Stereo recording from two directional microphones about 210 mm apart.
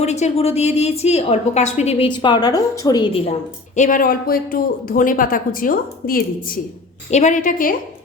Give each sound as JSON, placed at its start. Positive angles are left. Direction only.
{"t": 0.0, "sound": "a woman's voice", "side_deg": 30}
{"t": 3.8, "sound": "a woman's voice", "side_deg": 40}